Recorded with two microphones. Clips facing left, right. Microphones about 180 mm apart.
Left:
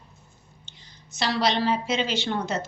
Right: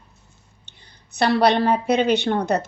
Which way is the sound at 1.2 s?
60° right (ahead or behind).